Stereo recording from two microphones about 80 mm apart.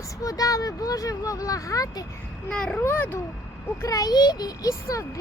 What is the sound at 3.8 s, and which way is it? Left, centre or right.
Speech, left.